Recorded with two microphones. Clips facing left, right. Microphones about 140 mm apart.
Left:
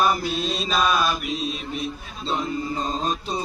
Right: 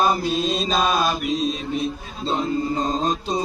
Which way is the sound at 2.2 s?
30° right (ahead or behind).